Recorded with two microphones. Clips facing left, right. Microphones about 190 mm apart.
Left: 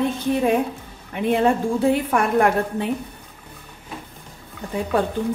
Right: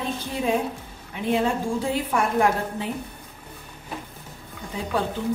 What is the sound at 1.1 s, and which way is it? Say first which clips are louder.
A woman's voice: left 4 dB; 60° left (ahead or behind).